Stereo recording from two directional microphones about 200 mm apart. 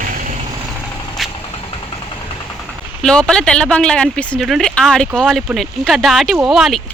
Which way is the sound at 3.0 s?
5° left (ahead or behind).